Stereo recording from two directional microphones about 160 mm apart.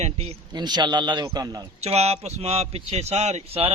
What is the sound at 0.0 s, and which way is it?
Speech, 40° right (ahead or behind).